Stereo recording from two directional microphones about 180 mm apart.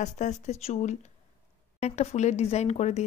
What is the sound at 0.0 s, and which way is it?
Speech, 40° left (ahead or behind).